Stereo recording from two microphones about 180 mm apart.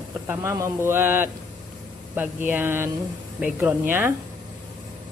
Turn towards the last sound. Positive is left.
turn(degrees=-10)  # may be behind; listen again after turning